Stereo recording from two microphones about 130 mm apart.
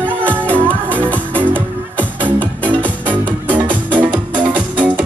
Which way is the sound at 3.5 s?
35° right (ahead or behind).